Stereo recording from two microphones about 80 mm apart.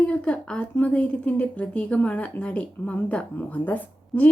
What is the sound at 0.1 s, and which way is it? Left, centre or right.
A woman's voice, centre.